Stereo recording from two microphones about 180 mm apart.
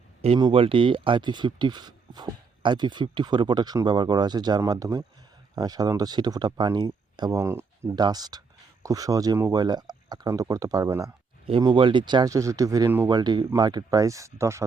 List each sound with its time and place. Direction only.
0.3 s speech: 25° right (ahead or behind)
11.4 s speech: 30° right (ahead or behind)